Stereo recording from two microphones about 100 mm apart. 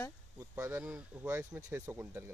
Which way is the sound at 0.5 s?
25° right (ahead or behind).